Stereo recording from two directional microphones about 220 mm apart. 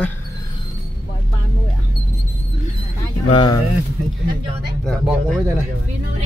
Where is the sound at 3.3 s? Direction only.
20° left (ahead or behind).